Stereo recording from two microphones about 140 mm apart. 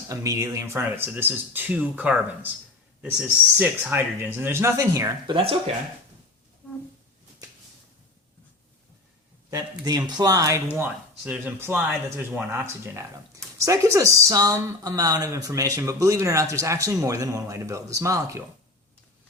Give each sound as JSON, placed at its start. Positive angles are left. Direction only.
{"t": 0.1, "sound": "speech", "side_deg": -20}
{"t": 5.3, "sound": "speech", "side_deg": -40}
{"t": 9.5, "sound": "speech", "side_deg": -25}